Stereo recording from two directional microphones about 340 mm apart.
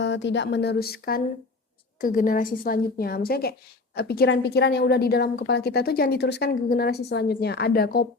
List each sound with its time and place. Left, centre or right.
0.0 s a woman's voice: left